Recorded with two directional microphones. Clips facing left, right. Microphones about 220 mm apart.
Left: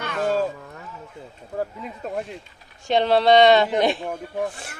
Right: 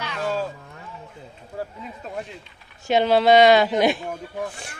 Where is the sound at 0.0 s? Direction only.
50° left (ahead or behind).